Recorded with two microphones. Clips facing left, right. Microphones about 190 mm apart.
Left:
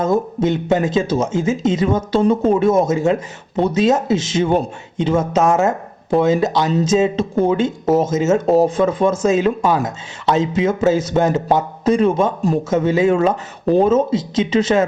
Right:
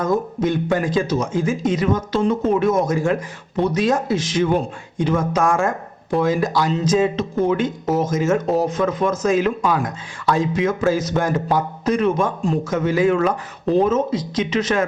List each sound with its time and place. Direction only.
0.0 s a man's voice: 25° left (ahead or behind)